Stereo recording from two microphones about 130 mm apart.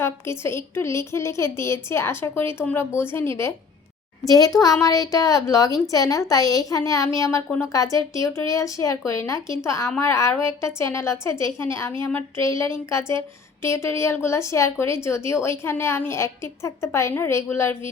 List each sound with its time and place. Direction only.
0.0 s a woman's voice: 20° left (ahead or behind)